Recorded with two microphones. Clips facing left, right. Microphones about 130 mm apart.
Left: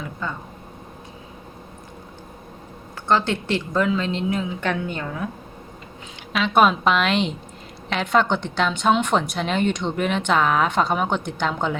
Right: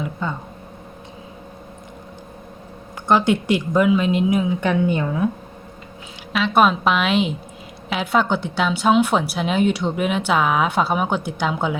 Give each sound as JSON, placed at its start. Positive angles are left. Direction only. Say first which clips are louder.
{"t": 0.2, "sound": "speech", "louder": "right 2 dB", "side_deg": -20}
{"t": 3.1, "sound": "a woman's voice", "louder": "right 4 dB", "side_deg": -15}
{"t": 6.3, "sound": "a woman's voice", "louder": "right 1 dB", "side_deg": 0}